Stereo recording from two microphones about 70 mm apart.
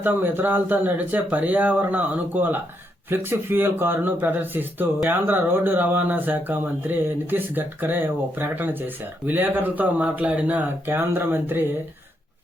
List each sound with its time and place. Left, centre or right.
0.0 s speech: right